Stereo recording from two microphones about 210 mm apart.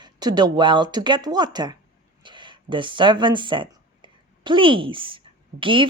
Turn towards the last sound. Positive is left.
turn(degrees=-25)  # may be behind; listen again after turning